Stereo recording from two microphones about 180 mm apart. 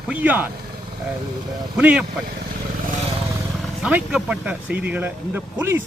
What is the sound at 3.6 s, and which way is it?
Speech, 5° right (ahead or behind).